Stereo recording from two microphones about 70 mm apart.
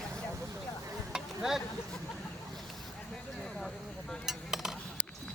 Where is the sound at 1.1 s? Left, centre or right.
Centre.